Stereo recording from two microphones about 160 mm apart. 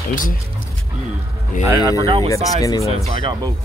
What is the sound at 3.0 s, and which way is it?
Speech, 35° right (ahead or behind).